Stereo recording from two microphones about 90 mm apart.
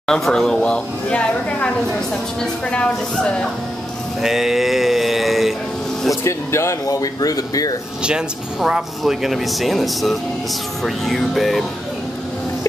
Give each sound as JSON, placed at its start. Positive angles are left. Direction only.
{"t": 0.1, "sound": "a woman's voice", "side_deg": 5}
{"t": 4.2, "sound": "mantra", "side_deg": -5}
{"t": 6.2, "sound": "speech", "side_deg": 30}
{"t": 8.0, "sound": "speech", "side_deg": -10}